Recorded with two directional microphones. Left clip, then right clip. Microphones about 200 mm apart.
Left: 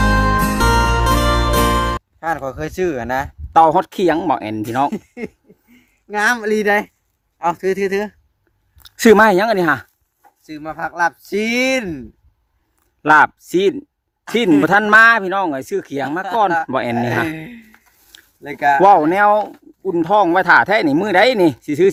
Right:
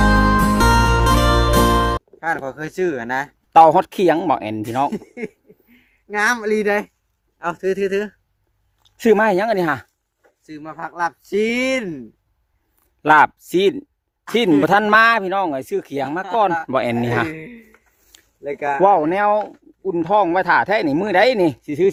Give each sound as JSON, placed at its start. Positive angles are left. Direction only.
{"t": 0.0, "sound": "music", "side_deg": 0}
{"t": 3.5, "sound": "speech", "side_deg": -15}
{"t": 4.6, "sound": "speech", "side_deg": 0}
{"t": 8.8, "sound": "a sound", "side_deg": 20}
{"t": 9.2, "sound": "speech", "side_deg": 10}
{"t": 10.4, "sound": "speech", "side_deg": 15}
{"t": 13.0, "sound": "speech", "side_deg": -5}
{"t": 17.3, "sound": "speech", "side_deg": 50}
{"t": 18.8, "sound": "speech", "side_deg": 5}